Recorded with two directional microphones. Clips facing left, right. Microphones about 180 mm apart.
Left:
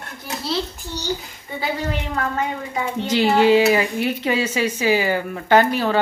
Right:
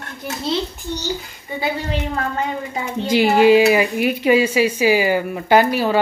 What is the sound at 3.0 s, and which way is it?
Speech, 10° right (ahead or behind).